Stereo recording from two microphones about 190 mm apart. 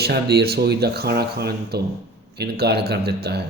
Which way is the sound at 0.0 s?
55° right (ahead or behind).